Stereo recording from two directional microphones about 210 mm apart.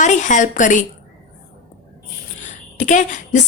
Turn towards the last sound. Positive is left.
turn(degrees=35)  # may be behind; listen again after turning